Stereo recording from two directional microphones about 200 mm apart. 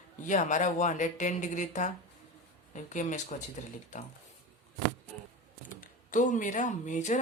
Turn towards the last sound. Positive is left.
turn(degrees=35)  # may be behind; listen again after turning